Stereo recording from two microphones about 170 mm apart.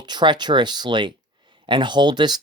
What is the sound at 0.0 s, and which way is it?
Speech, 25° right (ahead or behind).